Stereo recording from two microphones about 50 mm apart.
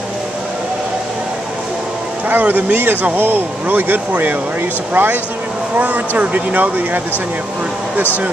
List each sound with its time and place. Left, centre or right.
2.2 s speech: right